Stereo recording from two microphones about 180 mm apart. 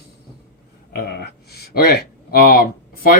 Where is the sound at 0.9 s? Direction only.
60° left (ahead or behind).